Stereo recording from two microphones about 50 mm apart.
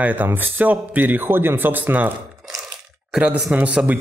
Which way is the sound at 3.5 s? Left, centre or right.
Right.